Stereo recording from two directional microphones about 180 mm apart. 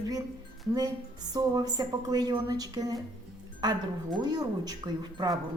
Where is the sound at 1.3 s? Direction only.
20° right (ahead or behind).